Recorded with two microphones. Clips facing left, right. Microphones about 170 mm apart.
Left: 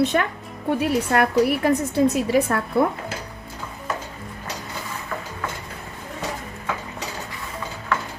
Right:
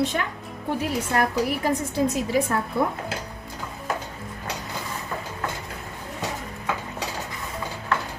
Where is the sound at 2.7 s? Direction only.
65° left (ahead or behind).